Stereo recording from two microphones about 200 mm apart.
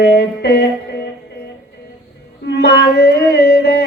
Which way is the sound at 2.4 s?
55° left (ahead or behind).